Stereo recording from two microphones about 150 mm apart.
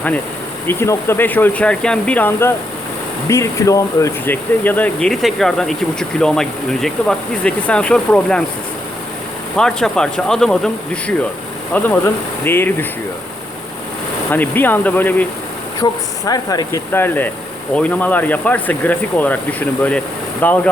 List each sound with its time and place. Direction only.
0.7 s speech: 15° left (ahead or behind)
4.3 s speech: 10° left (ahead or behind)
9.6 s speech: 5° left (ahead or behind)
14.3 s speech: 10° left (ahead or behind)
15.8 s speech: 25° left (ahead or behind)